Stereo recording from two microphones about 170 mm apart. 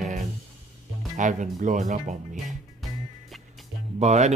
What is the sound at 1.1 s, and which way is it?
Speech, 45° right (ahead or behind).